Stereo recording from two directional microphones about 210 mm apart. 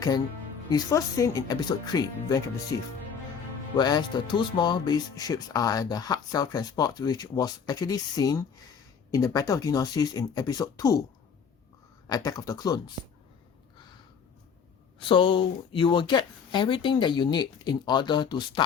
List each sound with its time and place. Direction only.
0.7 s speech: 15° left (ahead or behind)
12.0 s speech: 20° left (ahead or behind)
14.9 s speech: 25° left (ahead or behind)